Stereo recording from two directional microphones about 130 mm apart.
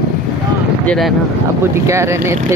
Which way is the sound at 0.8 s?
10° left (ahead or behind).